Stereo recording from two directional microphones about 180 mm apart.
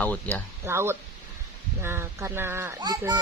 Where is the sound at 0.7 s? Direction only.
15° right (ahead or behind).